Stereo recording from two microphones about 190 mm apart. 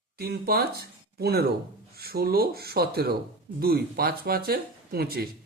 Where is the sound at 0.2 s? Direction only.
55° right (ahead or behind).